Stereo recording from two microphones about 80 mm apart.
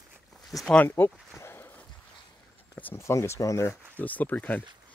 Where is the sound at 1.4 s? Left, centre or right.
Left.